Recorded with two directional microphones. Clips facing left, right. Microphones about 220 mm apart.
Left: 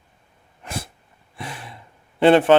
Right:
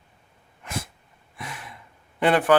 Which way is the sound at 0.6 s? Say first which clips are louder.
Left 1 dB; 30° left (ahead or behind).